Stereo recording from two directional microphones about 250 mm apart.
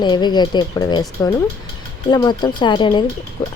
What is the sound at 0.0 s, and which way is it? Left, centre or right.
Speech, centre.